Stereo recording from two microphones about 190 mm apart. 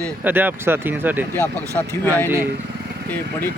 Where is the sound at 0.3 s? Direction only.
10° right (ahead or behind).